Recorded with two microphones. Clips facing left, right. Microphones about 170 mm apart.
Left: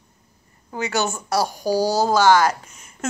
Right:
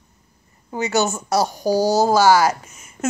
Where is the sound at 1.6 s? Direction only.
15° right (ahead or behind).